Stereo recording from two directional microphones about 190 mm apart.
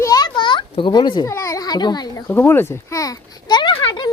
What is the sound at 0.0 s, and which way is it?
Children playing, 20° left (ahead or behind).